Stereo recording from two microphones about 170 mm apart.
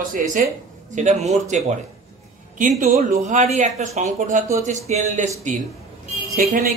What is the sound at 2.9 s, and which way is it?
A man's voice, 45° right (ahead or behind).